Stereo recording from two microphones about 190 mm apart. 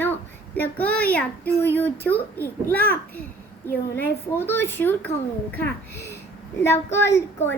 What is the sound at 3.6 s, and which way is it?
A child's voice, 10° left (ahead or behind).